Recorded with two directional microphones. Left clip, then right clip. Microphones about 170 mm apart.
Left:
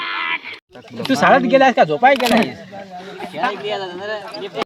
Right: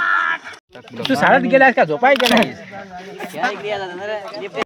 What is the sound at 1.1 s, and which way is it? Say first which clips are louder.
Speech: left 1 dB; 25° left (ahead or behind).